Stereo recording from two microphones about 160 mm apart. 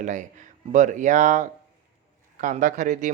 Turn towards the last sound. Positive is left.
turn(degrees=-50)  # may be behind; listen again after turning